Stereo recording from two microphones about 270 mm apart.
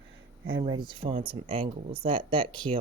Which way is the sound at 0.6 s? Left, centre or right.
Centre.